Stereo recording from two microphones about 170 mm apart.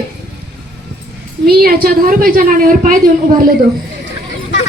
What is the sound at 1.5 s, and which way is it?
A woman's voice, 60° right (ahead or behind).